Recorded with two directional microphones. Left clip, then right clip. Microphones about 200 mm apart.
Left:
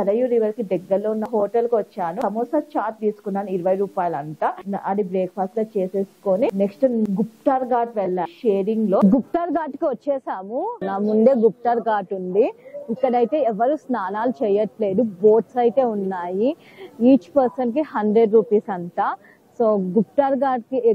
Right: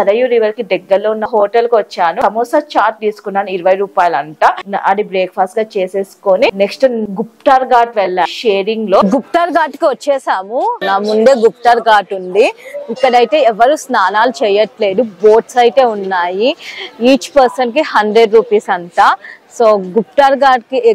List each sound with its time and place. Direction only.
0.0 s a woman's voice: 10° right (ahead or behind)
2.7 s a woman's voice: 10° right (ahead or behind)
17.6 s a woman's voice: 10° right (ahead or behind)
19.6 s a woman's voice: 30° right (ahead or behind)
20.2 s a woman's voice: 10° right (ahead or behind)